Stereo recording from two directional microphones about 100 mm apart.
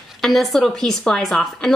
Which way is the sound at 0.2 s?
Centre (ahead or behind).